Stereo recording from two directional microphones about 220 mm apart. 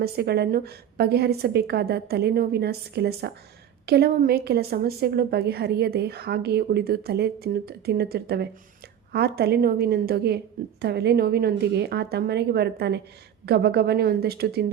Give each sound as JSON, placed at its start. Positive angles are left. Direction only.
{"t": 0.0, "sound": "a woman's voice", "side_deg": -45}